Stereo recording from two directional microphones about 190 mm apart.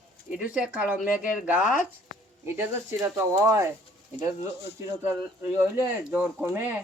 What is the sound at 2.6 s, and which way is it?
Speech, 15° right (ahead or behind).